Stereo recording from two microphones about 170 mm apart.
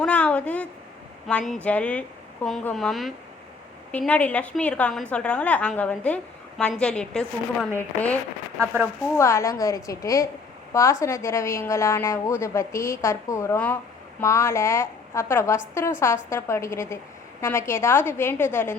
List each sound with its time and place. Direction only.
0.0 s a woman's voice: 10° left (ahead or behind)